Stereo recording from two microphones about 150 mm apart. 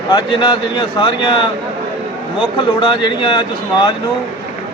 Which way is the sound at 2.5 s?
30° left (ahead or behind).